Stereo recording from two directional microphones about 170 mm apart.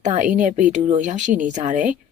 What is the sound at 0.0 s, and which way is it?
Speech, 45° right (ahead or behind).